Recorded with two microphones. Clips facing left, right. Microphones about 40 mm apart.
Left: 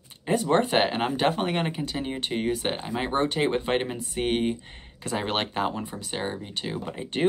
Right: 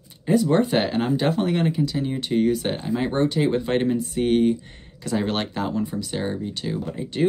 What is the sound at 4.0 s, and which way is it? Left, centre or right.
Speech, left.